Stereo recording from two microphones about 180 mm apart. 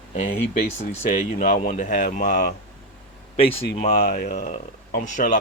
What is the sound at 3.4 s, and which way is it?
Speech, 35° left (ahead or behind).